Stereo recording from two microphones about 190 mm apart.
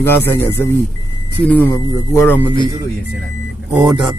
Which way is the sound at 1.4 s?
10° left (ahead or behind).